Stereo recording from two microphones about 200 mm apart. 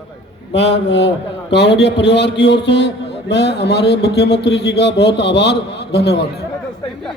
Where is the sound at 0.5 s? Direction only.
60° left (ahead or behind).